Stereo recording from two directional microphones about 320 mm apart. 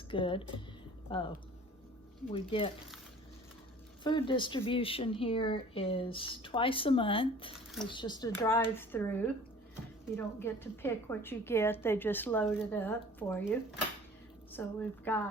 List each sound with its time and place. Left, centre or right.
0.1 s a woman's voice: centre
2.3 s a woman's voice: centre
4.0 s a woman's voice: centre
7.5 s squish: centre
7.9 s a woman's voice: centre